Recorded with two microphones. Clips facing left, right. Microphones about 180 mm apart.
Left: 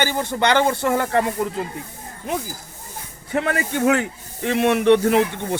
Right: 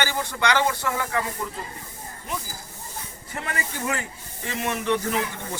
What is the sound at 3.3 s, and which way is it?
Speech, 70° left (ahead or behind).